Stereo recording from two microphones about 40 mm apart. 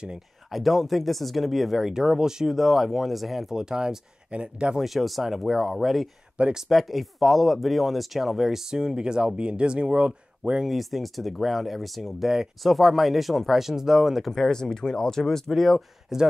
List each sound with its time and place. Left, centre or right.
0.5 s speech: centre
1.9 s speech: centre
2.5 s speech: centre
3.5 s speech: centre
4.3 s speech: right
4.7 s speech: centre
6.4 s speech: right
6.7 s speech: centre; by 10.5 s right
10.7 s speech: centre
14.3 s speech: centre
16.1 s speech: centre